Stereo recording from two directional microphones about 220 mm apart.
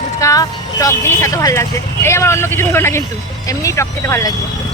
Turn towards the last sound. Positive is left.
turn(degrees=10)  # may be behind; listen again after turning